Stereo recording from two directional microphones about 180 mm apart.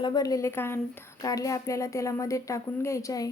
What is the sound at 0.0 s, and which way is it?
A woman's voice, 20° left (ahead or behind).